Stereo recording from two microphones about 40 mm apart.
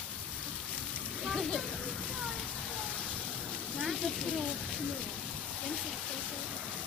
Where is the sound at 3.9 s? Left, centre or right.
Centre.